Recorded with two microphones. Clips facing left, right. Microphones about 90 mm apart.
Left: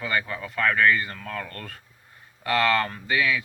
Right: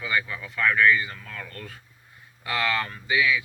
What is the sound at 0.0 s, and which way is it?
Speech, 45° left (ahead or behind).